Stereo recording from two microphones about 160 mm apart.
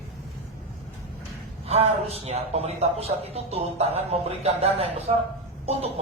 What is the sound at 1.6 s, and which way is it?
A man's voice, 40° right (ahead or behind).